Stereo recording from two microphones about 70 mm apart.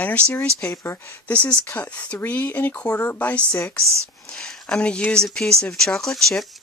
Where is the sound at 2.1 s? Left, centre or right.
Left.